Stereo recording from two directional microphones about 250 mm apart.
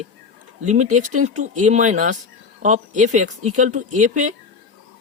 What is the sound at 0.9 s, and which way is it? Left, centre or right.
Speech, right.